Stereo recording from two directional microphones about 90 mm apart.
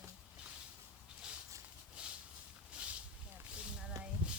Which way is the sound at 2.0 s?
10° right (ahead or behind).